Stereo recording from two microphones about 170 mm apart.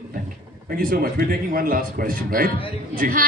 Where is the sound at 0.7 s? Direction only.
60° right (ahead or behind).